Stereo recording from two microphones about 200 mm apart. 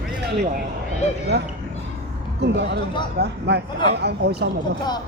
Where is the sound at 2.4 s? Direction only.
60° right (ahead or behind).